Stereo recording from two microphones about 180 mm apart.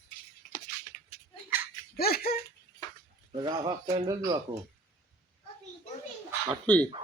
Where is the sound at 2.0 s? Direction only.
60° left (ahead or behind).